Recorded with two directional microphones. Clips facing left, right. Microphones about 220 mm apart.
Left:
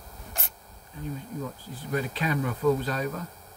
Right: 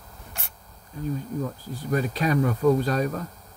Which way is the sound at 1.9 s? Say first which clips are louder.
Right 5 dB; 40° right (ahead or behind).